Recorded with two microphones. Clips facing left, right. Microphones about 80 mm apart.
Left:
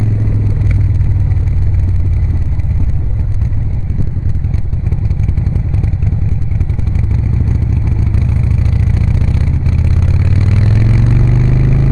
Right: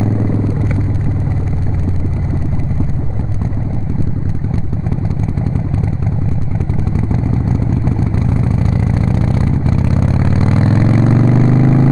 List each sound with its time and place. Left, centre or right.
7.8 s vehicle: right